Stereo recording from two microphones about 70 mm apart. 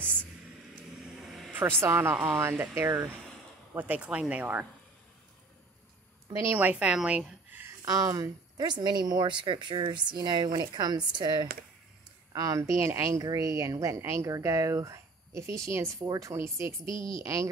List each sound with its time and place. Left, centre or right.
1.2 s vehicle: centre
1.8 s speech: right
3.7 s speech: right
6.6 s speech: centre
7.8 s speech: right
8.5 s a woman's voice: right
12.3 s speech: right
13.2 s speech: right